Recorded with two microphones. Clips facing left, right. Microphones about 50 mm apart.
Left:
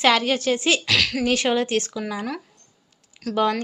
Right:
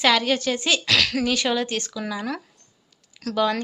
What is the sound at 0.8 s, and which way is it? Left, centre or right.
Speech, centre.